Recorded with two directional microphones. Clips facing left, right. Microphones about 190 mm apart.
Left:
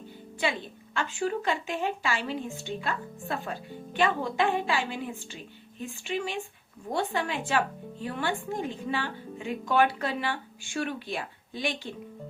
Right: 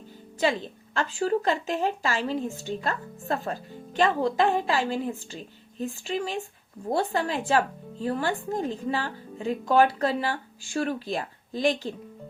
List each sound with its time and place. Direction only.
0.4 s speech: 40° right (ahead or behind)